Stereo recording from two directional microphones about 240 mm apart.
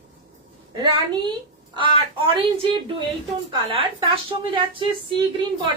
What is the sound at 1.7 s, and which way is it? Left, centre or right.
Speech, centre.